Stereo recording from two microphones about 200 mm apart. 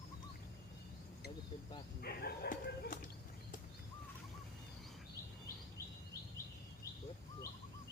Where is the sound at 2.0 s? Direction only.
50° left (ahead or behind).